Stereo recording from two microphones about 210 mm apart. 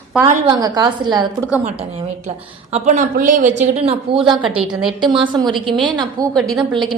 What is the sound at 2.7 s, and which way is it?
A woman's voice, 35° right (ahead or behind).